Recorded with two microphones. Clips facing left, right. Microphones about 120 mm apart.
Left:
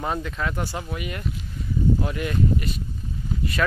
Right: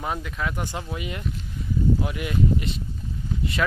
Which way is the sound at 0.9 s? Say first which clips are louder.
Left 1 dB; 20° right (ahead or behind).